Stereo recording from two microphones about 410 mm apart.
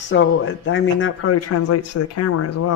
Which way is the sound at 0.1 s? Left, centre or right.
Left.